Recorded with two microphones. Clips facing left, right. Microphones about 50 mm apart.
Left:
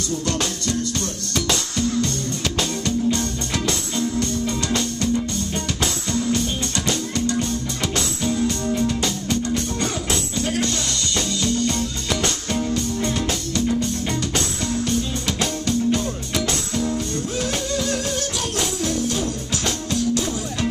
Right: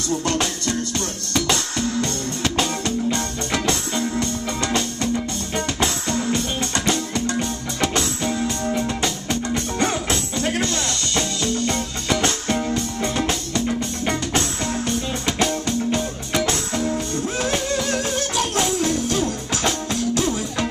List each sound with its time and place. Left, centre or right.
0.7 s music: right
7.2 s music: right
19.5 s music: right